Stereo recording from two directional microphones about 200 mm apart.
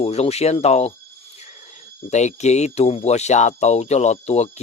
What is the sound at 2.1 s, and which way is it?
Speech, 35° left (ahead or behind).